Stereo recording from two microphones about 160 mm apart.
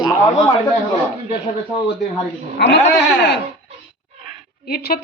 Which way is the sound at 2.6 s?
90° left.